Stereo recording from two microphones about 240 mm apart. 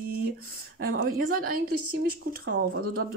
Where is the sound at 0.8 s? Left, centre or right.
Right.